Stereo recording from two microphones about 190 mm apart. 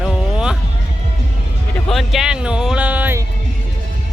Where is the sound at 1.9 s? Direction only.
Centre (ahead or behind).